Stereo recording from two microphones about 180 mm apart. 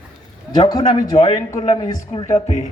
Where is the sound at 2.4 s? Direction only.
40° left (ahead or behind).